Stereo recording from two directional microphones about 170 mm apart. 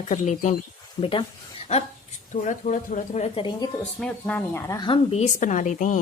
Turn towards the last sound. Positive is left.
turn(degrees=45)  # may be behind; listen again after turning